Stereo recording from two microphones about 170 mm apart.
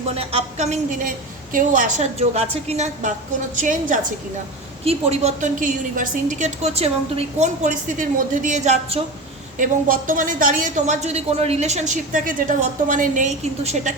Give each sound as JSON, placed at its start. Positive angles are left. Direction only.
{"t": 0.2, "sound": "a woman's voice", "side_deg": -35}
{"t": 4.9, "sound": "a woman's voice", "side_deg": -35}
{"t": 9.6, "sound": "a woman's voice", "side_deg": -55}